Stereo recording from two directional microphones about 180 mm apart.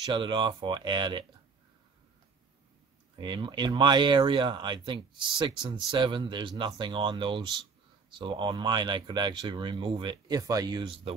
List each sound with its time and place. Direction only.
0.1 s speech: 25° right (ahead or behind)
3.2 s speech: 25° right (ahead or behind)